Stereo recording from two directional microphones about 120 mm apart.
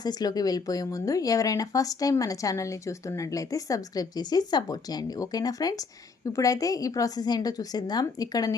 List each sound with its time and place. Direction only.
0.0 s speech: 35° left (ahead or behind)